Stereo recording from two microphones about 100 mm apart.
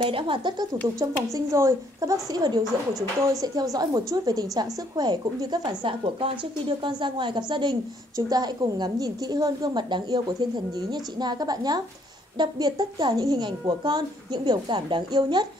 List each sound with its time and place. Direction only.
0.0 s speech: 60° right (ahead or behind)
0.9 s a woman's voice: 35° right (ahead or behind); by 15.4 s 50° right (ahead or behind)